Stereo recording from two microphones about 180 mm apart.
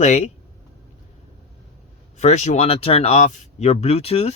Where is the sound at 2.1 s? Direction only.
40° left (ahead or behind).